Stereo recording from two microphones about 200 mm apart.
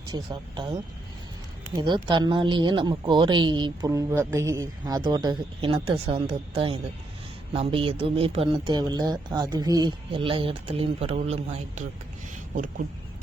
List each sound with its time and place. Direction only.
0.1 s speech: 20° right (ahead or behind)
12.5 s speech: 40° right (ahead or behind)